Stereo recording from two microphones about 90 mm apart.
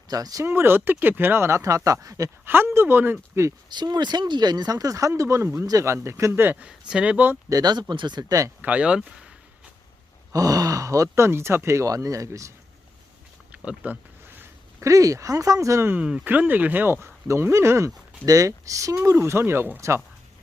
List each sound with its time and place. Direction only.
0.1 s speech: 45° right (ahead or behind)
0.4 s speech: 25° right (ahead or behind)
2.4 s speech: 25° right (ahead or behind)
3.7 s speech: 55° right (ahead or behind); by 6.7 s 20° right (ahead or behind)
6.7 s speech: 10° right (ahead or behind)
7.5 s speech: 50° right (ahead or behind)
8.2 s speech: 40° right (ahead or behind)
8.6 s speech: 15° right (ahead or behind)
10.3 s speech: 40° right (ahead or behind)
13.5 s a sound: 15° right (ahead or behind)
14.8 s speech: 35° right (ahead or behind)
16.0 s speech: 10° right (ahead or behind); by 20.0 s 30° right (ahead or behind)